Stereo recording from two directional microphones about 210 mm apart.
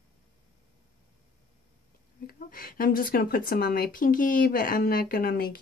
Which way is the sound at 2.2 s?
45° left (ahead or behind).